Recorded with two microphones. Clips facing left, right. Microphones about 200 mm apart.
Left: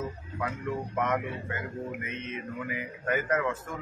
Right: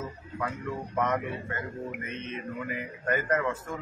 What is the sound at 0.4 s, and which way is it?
Speech, 5° left (ahead or behind).